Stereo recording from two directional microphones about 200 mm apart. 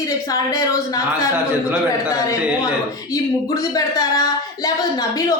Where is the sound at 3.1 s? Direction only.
20° left (ahead or behind).